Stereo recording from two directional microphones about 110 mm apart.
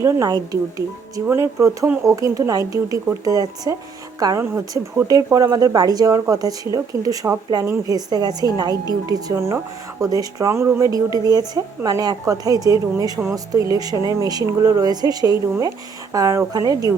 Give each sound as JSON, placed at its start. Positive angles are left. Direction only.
{"t": 0.0, "sound": "speech", "side_deg": -30}
{"t": 1.1, "sound": "speech", "side_deg": -25}